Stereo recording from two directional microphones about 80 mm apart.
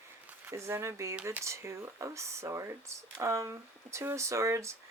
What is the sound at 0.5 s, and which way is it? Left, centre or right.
Speech, right.